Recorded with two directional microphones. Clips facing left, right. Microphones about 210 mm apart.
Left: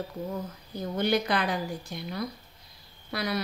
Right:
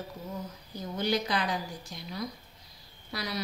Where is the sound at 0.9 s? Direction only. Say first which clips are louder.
Left 3 dB; 55° left (ahead or behind).